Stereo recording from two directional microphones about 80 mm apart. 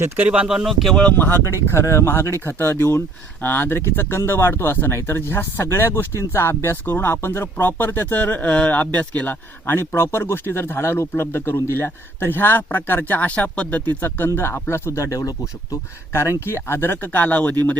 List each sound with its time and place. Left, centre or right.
0.2 s speech: centre
1.1 s speech: left
9.9 s speech: left